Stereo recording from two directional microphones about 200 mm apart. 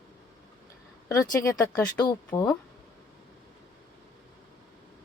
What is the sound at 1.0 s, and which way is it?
Speech, 15° left (ahead or behind).